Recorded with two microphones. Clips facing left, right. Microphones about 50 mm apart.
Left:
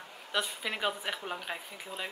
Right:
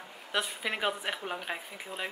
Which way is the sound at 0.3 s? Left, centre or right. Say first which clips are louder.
Right 1 dB; centre.